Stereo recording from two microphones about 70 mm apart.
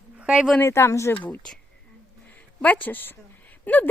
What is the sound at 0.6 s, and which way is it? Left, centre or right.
Speech, left.